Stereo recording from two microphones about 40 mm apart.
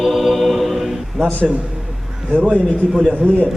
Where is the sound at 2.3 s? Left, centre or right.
Right.